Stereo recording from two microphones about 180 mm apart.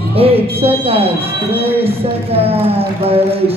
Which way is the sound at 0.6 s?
30° right (ahead or behind).